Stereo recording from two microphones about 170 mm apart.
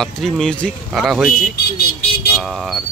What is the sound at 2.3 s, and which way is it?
Speech, centre (ahead or behind).